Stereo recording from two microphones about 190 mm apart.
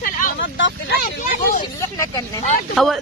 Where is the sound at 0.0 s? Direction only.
45° left (ahead or behind).